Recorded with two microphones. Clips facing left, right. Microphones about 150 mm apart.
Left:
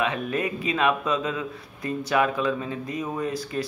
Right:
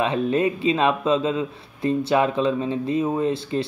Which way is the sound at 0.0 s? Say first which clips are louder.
Right 5 dB; 30° right (ahead or behind).